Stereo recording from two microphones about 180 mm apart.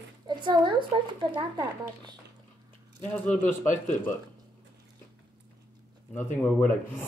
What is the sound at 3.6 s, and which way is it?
Speech, 45° left (ahead or behind).